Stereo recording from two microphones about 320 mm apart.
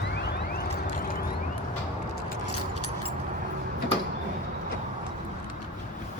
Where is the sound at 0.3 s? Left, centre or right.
Left.